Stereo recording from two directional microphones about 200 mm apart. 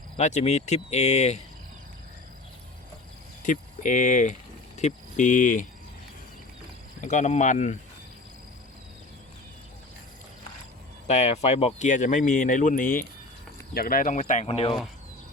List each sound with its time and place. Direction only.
0.2 s speech: 35° left (ahead or behind)
3.4 s speech: 40° left (ahead or behind)
7.0 s speech: 35° left (ahead or behind)
11.1 s speech: 35° left (ahead or behind)